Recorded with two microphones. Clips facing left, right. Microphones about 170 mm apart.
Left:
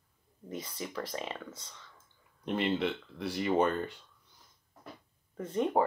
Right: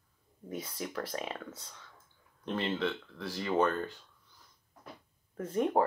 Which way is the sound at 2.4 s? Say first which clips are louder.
Left 2 dB; 15° left (ahead or behind).